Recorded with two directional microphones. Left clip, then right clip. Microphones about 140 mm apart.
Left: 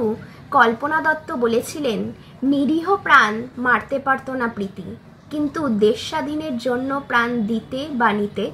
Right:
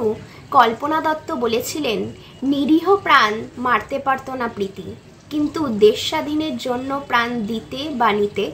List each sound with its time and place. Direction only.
0.5 s a woman's voice: 25° right (ahead or behind)